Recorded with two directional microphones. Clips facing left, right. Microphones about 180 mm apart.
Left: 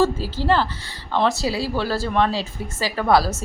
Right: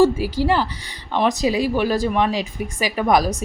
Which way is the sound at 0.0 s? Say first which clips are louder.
Right 4 dB; 10° right (ahead or behind).